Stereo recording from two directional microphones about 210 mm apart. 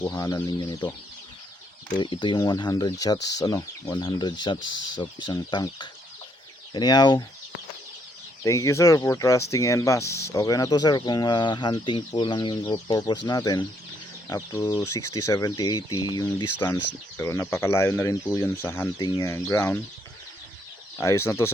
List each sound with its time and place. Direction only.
0.0 s speech: 15° left (ahead or behind)
2.0 s speech: 20° left (ahead or behind)
8.4 s speech: 15° left (ahead or behind)
21.0 s speech: 15° left (ahead or behind)